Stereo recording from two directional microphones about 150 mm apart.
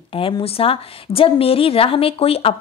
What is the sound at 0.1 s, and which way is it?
A woman's voice, 35° left (ahead or behind).